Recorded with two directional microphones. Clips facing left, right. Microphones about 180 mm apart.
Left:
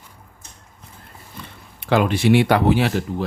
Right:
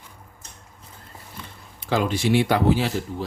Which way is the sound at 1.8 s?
65° left (ahead or behind).